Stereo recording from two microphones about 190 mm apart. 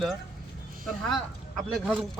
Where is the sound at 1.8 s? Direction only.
5° right (ahead or behind).